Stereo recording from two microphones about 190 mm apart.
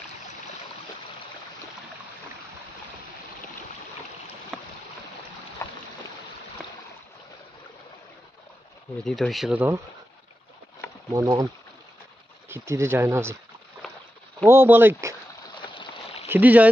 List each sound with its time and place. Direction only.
4.5 s boat: centre (ahead or behind)
5.6 s boat: 15° left (ahead or behind)
9.0 s speech: centre (ahead or behind)
11.1 s speech: 20° right (ahead or behind)
12.4 s speech: 15° right (ahead or behind)
14.5 s speech: 10° right (ahead or behind)
15.5 s a sound: 25° left (ahead or behind)
16.3 s speech: 10° right (ahead or behind)